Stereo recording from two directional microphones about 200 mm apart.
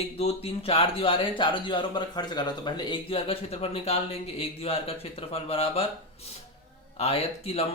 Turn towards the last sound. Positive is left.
turn(degrees=30)  # may be behind; listen again after turning